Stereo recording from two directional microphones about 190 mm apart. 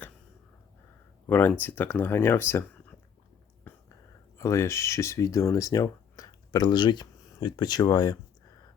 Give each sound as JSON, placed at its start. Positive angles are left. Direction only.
{"t": 1.3, "sound": "speech", "side_deg": 10}
{"t": 3.6, "sound": "whispering", "side_deg": 10}
{"t": 4.4, "sound": "speech", "side_deg": 15}